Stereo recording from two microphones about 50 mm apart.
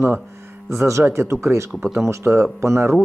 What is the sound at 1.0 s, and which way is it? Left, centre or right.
Speech, right.